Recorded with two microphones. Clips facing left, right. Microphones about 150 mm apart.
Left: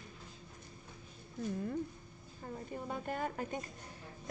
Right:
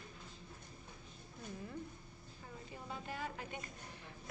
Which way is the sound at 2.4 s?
50° left (ahead or behind).